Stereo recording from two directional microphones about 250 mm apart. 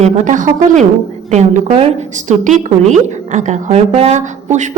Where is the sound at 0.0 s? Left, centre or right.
Right.